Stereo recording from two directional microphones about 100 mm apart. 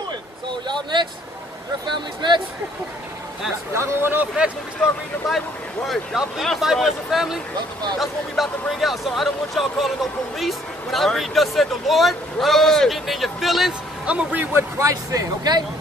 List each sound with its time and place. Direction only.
1.9 s speech: 50° right (ahead or behind)
3.7 s speech: 25° right (ahead or behind)
5.2 s speech: 5° right (ahead or behind); by 15.6 s 40° right (ahead or behind)